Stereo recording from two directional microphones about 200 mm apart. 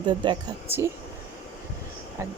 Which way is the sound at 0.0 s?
20° right (ahead or behind).